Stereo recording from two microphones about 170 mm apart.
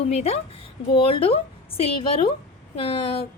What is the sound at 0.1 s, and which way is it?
A woman's voice, 40° left (ahead or behind).